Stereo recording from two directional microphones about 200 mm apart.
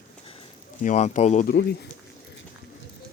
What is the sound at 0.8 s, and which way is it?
Speech, 35° left (ahead or behind).